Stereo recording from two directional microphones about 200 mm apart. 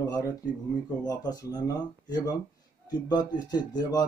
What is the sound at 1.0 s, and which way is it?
Speech, 20° left (ahead or behind).